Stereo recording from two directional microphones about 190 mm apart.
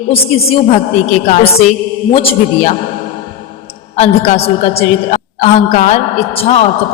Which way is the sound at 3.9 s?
35° left (ahead or behind).